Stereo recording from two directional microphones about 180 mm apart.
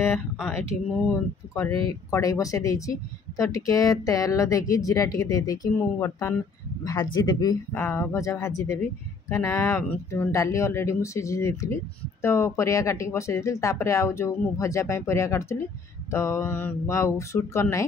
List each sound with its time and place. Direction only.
0.4 s speech: centre (ahead or behind)
1.5 s speech: 15° left (ahead or behind)